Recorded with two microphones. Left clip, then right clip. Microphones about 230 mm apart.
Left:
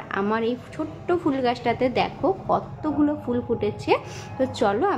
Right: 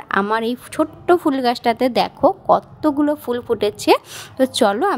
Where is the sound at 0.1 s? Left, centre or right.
Right.